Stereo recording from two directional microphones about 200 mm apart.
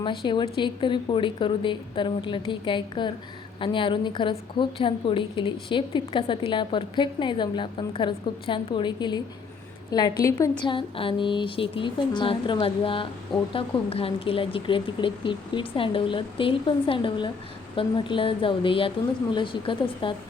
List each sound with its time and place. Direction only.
0.0 s speech: 25° left (ahead or behind)